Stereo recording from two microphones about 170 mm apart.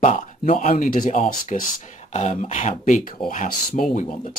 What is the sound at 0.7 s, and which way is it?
Speech, 55° left (ahead or behind).